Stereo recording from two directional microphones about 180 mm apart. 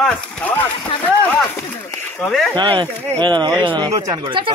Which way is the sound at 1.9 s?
10° left (ahead or behind).